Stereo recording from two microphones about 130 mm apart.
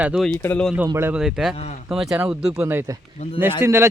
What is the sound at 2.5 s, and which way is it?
Speech, 20° right (ahead or behind).